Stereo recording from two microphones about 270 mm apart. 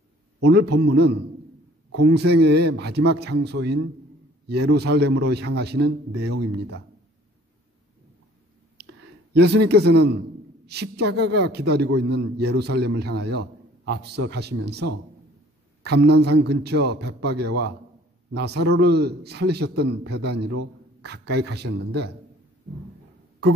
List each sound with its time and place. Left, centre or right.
0.4 s a man's voice: right
5.8 s speech: right
8.7 s a sound: right
9.7 s a man's voice: right